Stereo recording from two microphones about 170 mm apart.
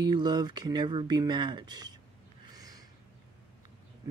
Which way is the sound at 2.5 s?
20° right (ahead or behind).